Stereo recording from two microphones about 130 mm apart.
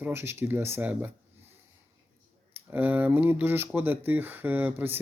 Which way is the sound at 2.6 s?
15° right (ahead or behind).